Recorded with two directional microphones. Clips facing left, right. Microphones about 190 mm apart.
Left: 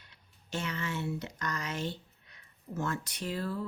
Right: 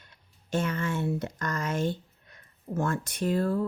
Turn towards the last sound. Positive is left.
turn(degrees=-50)  # may be behind; listen again after turning